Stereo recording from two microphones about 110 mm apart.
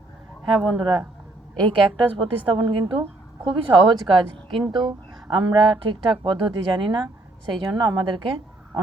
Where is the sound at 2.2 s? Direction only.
50° right (ahead or behind).